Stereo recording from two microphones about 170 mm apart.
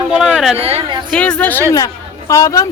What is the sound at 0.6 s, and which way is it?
Speech, 35° right (ahead or behind).